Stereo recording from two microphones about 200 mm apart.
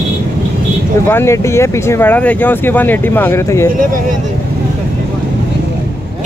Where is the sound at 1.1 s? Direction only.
15° left (ahead or behind).